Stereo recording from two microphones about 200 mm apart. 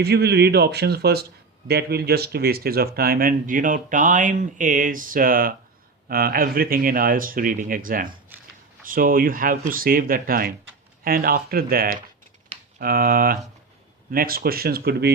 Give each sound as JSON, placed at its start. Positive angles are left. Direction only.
{"t": 0.0, "sound": "speech", "side_deg": -55}